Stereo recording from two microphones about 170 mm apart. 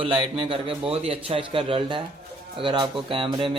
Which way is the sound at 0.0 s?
35° right (ahead or behind).